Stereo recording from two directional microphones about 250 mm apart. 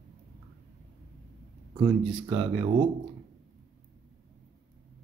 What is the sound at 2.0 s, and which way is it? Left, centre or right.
Speech, centre.